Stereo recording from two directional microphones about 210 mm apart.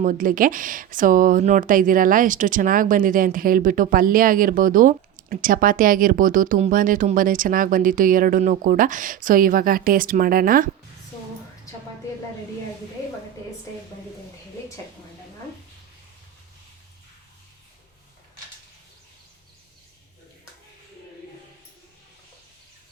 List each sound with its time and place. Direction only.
0.0 s speech: 40° right (ahead or behind)